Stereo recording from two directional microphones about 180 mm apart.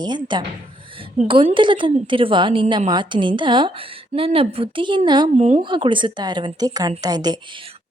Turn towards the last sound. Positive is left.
turn(degrees=-20)  # may be behind; listen again after turning